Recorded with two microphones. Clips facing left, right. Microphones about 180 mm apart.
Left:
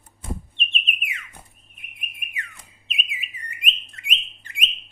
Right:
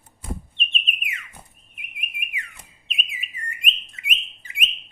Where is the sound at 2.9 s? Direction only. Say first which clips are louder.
Left 1 dB; centre (ahead or behind).